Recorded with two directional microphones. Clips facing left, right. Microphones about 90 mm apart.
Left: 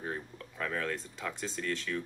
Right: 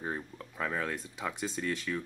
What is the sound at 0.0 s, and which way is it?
Speech, 15° right (ahead or behind).